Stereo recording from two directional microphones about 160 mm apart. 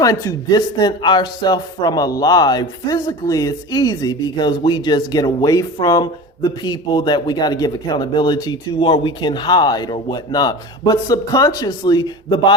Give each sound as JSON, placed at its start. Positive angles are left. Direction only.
{"t": 0.0, "sound": "speech", "side_deg": 20}